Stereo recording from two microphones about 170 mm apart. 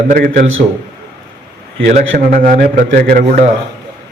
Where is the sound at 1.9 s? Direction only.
40° right (ahead or behind).